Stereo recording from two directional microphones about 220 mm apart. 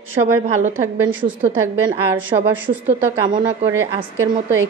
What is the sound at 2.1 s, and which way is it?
A woman's voice, 10° right (ahead or behind).